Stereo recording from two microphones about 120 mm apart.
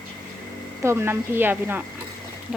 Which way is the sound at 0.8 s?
20° right (ahead or behind).